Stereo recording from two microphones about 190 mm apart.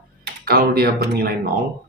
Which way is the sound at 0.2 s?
55° right (ahead or behind).